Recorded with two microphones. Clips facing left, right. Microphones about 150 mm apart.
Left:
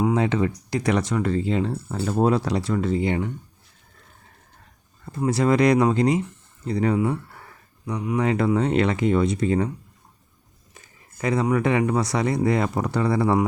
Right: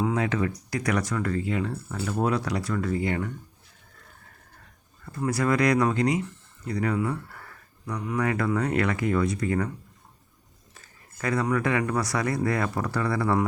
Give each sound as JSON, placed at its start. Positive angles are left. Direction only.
{"t": 0.1, "sound": "speech", "side_deg": 25}
{"t": 5.0, "sound": "speech", "side_deg": 25}
{"t": 10.8, "sound": "speech", "side_deg": 20}